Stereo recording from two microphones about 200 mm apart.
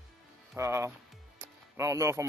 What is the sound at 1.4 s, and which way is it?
Music, 15° right (ahead or behind).